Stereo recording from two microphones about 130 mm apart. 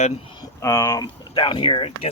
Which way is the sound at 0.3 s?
30° left (ahead or behind).